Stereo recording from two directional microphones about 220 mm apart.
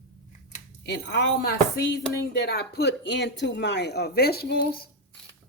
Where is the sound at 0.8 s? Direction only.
50° left (ahead or behind).